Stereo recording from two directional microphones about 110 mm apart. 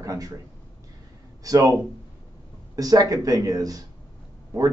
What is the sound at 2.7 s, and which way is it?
Speech, 35° right (ahead or behind).